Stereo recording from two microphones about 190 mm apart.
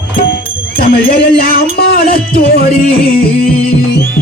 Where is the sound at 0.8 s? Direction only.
50° left (ahead or behind).